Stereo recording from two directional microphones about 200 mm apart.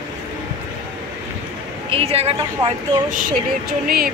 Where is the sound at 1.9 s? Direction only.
30° right (ahead or behind).